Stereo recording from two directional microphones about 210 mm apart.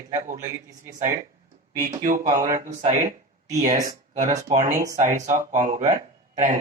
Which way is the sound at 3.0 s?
15° right (ahead or behind).